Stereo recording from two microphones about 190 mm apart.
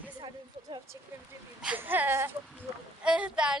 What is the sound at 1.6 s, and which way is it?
Speech, 10° right (ahead or behind).